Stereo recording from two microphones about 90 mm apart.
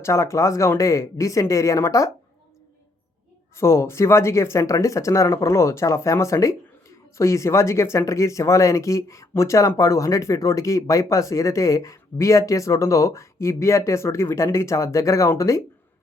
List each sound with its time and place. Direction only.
0.0 s speech: 35° left (ahead or behind)
3.6 s speech: 30° left (ahead or behind)